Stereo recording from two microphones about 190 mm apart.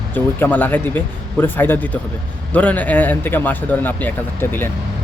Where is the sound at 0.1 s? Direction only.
10° left (ahead or behind).